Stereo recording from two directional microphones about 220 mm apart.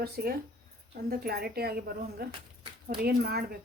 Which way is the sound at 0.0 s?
45° right (ahead or behind).